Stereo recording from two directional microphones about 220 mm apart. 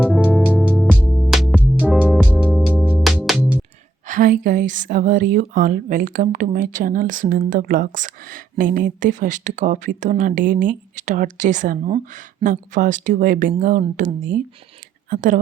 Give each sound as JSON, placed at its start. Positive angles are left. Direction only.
{"t": 0.0, "sound": "music", "side_deg": -5}
{"t": 0.7, "sound": "music", "side_deg": 5}
{"t": 4.0, "sound": "a woman's voice", "side_deg": -35}